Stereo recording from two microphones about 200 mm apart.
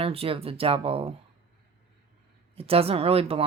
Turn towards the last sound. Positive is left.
turn(degrees=-30)  # may be behind; listen again after turning